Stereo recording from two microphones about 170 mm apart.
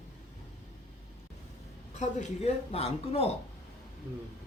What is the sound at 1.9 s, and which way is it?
A man's voice, 45° left (ahead or behind).